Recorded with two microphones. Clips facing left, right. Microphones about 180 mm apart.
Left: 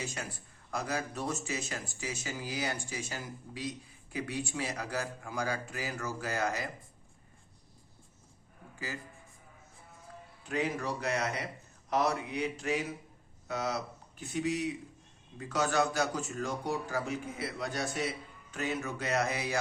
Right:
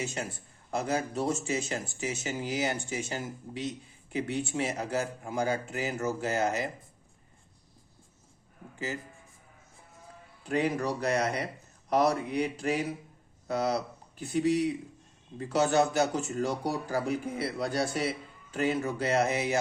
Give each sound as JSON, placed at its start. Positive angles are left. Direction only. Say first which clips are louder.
{"t": 0.0, "sound": "speech", "louder": "right 5 dB", "side_deg": -25}
{"t": 8.7, "sound": "a sound", "louder": "right 5 dB", "side_deg": -25}
{"t": 10.4, "sound": "speech", "louder": "right 5 dB", "side_deg": -35}